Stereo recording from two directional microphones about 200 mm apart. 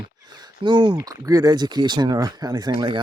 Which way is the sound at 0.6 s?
20° right (ahead or behind).